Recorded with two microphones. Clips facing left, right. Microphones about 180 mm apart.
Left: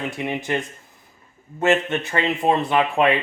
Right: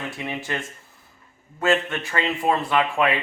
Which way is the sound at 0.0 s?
15° left (ahead or behind).